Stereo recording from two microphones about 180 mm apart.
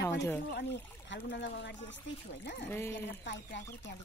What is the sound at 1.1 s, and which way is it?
Speech, 80° left.